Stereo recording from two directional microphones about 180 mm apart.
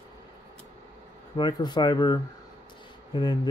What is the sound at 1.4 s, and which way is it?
Speech, 25° left (ahead or behind).